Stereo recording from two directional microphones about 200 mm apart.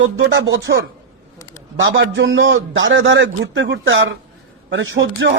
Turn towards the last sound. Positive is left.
turn(degrees=-70)  # may be behind; listen again after turning